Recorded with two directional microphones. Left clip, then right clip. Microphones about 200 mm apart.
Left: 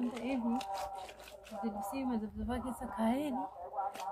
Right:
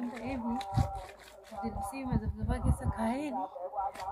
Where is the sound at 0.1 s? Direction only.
5° left (ahead or behind).